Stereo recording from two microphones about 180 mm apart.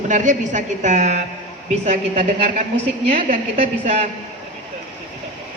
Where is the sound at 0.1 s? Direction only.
45° right (ahead or behind).